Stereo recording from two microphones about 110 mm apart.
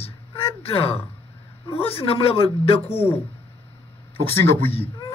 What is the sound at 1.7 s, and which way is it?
Speech, 60° left (ahead or behind).